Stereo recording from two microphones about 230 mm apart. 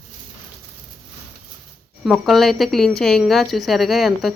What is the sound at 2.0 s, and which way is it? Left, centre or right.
Speech, centre.